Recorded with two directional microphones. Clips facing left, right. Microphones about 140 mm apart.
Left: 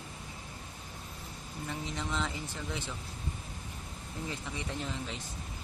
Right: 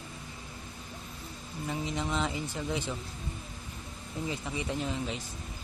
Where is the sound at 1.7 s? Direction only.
15° right (ahead or behind).